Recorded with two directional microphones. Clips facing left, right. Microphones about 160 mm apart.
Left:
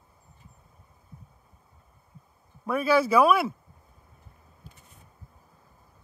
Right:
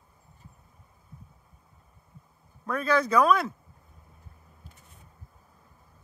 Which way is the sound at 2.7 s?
10° left (ahead or behind).